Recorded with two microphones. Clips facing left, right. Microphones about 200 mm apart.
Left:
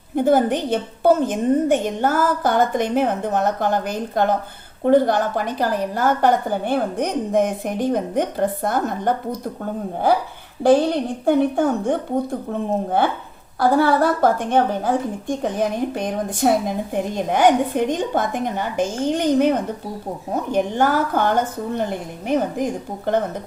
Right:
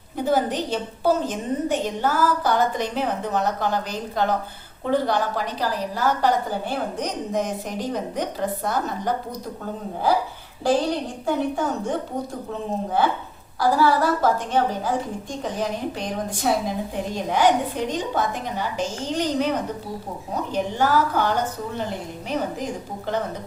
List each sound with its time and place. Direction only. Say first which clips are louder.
0.2 s a woman's voice: left 5 dB; 55° left (ahead or behind)
10.6 s a woman's voice: left 6 dB; 55° left (ahead or behind)